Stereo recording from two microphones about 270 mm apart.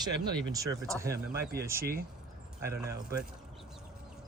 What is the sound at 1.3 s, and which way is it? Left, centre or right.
Speech, right.